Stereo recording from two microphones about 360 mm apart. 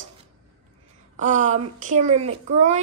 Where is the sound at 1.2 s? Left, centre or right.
Right.